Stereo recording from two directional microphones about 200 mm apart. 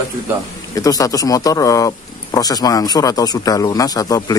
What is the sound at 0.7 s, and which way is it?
Speech, 15° left (ahead or behind).